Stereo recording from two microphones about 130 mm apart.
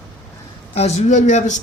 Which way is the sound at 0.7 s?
60° left (ahead or behind).